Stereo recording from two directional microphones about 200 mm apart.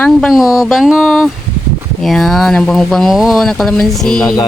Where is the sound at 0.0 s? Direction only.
Centre (ahead or behind).